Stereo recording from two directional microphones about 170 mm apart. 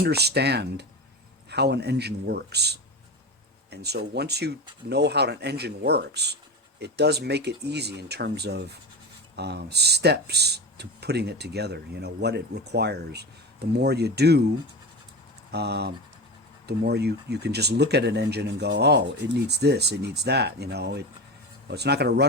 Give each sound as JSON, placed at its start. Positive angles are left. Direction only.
{"t": 0.0, "sound": "speech", "side_deg": -70}
{"t": 15.5, "sound": "speech", "side_deg": -75}